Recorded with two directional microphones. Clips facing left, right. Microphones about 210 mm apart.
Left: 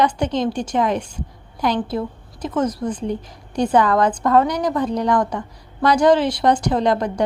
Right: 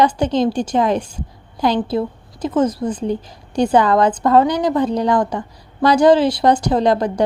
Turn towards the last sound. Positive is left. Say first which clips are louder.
# right 3 dB
turn(degrees=-35)  # may be behind; listen again after turning